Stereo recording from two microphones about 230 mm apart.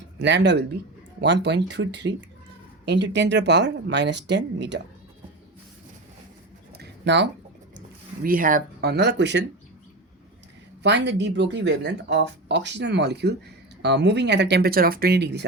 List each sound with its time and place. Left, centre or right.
0.2 s speech: right
6.7 s a sound: right
8.2 s speech: right
10.8 s speech: right